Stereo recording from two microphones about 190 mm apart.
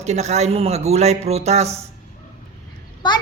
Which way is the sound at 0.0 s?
35° right (ahead or behind).